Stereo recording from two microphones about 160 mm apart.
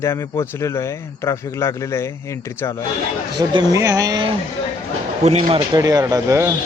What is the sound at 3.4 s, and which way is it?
Speech, 25° right (ahead or behind).